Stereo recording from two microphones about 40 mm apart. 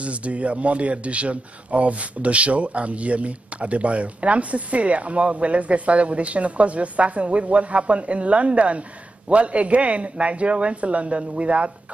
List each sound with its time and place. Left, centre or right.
0.0 s speech: right